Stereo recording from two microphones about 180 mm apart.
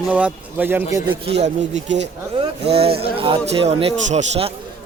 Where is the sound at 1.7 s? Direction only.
90° right.